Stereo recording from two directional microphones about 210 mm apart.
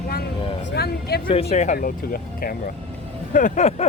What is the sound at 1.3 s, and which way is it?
Speech, 30° left (ahead or behind).